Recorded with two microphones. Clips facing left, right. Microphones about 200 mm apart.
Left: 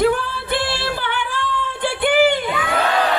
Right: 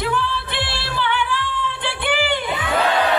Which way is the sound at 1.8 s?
45° left (ahead or behind).